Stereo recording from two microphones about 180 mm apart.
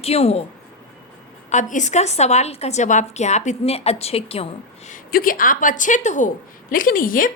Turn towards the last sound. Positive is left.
turn(degrees=50)  # may be behind; listen again after turning